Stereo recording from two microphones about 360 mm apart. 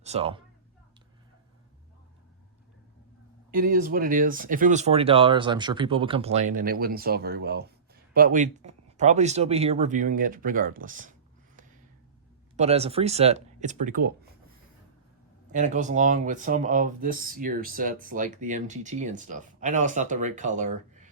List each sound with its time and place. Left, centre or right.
0.0 s speech: centre
3.5 s speech: right
12.5 s speech: centre
15.5 s speech: centre